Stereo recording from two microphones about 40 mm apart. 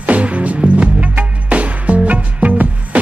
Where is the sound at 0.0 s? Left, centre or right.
Right.